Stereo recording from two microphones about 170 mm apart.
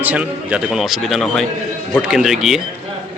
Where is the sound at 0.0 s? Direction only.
10° right (ahead or behind).